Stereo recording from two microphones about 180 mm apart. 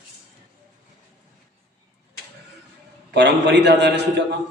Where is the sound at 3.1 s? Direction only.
70° right (ahead or behind).